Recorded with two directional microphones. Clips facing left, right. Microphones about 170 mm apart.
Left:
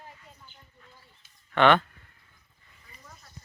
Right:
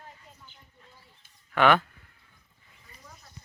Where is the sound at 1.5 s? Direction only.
5° right (ahead or behind).